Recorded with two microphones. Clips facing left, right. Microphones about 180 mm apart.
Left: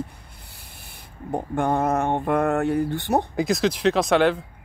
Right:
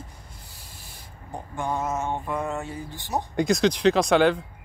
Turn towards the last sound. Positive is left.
turn(degrees=0)  # may be behind; listen again after turning